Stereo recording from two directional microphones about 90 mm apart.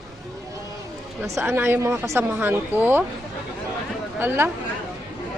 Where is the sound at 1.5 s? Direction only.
25° right (ahead or behind).